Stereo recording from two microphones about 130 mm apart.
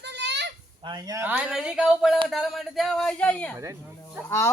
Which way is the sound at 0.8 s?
35° right (ahead or behind).